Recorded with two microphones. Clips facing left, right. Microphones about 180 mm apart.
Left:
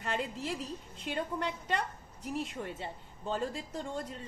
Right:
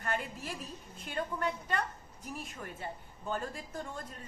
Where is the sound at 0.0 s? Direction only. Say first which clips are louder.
Left 2 dB; 20° left (ahead or behind).